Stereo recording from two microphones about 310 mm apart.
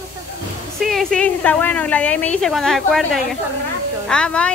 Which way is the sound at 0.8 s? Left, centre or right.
Centre.